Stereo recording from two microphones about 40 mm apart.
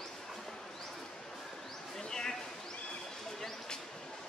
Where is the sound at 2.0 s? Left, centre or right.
Centre.